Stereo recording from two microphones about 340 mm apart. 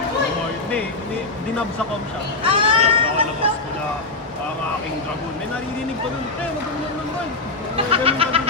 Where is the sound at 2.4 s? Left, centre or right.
Centre.